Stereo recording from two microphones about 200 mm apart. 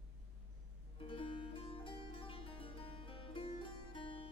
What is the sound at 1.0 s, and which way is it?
Music, 25° left (ahead or behind).